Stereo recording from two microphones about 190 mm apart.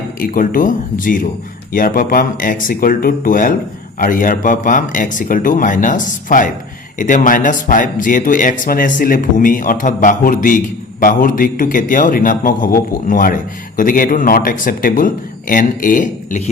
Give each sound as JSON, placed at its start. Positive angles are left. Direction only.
{"t": 0.2, "sound": "a man's voice", "side_deg": 45}